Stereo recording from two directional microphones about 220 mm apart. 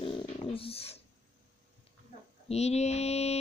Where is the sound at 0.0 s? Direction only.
25° left (ahead or behind).